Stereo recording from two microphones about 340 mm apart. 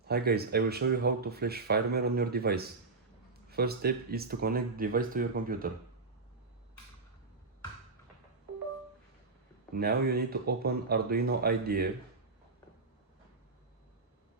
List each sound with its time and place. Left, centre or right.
0.0 s speech: right
9.7 s speech: right